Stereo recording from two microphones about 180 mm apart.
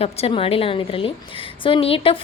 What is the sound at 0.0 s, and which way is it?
A woman's voice, 30° left (ahead or behind).